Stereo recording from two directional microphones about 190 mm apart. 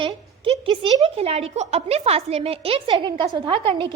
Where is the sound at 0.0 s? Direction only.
30° right (ahead or behind).